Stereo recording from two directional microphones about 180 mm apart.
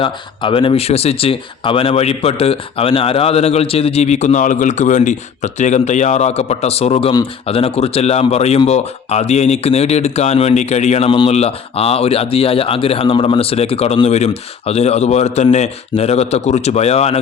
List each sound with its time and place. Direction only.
0.0 s speech: 30° left (ahead or behind)